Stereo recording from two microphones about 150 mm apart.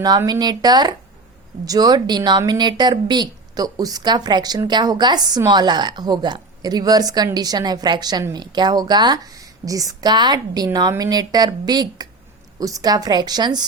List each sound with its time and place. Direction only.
0.2 s speech: 25° right (ahead or behind)